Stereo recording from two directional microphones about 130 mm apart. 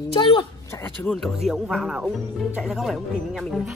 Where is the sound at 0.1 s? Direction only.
40° left (ahead or behind).